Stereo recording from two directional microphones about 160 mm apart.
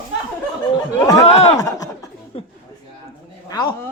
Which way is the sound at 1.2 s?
40° left (ahead or behind).